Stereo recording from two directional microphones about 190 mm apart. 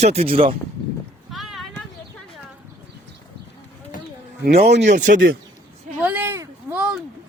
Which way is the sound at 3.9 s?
45° left (ahead or behind).